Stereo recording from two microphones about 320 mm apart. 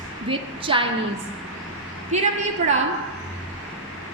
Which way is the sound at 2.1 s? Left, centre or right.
Right.